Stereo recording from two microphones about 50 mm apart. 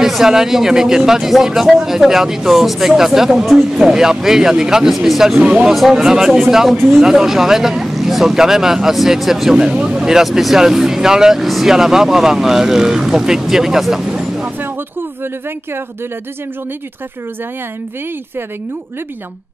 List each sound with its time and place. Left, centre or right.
0.0 s speech: centre
5.4 s speech: right
5.7 s speech: centre